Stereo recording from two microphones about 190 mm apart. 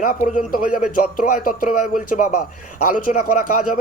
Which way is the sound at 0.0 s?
45° left (ahead or behind).